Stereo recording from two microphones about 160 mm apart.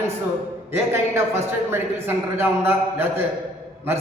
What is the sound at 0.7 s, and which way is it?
A man's voice, 15° right (ahead or behind).